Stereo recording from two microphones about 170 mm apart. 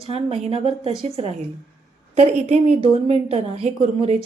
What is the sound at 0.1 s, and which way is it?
A woman's voice, 35° right (ahead or behind).